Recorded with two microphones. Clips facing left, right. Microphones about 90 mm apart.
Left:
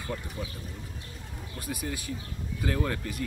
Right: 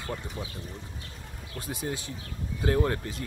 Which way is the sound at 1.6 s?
25° right (ahead or behind).